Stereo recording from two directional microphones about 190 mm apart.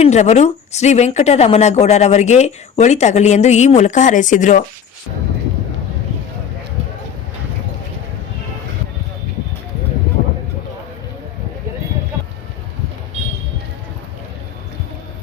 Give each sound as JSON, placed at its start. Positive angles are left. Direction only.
{"t": 0.0, "sound": "speech", "side_deg": 35}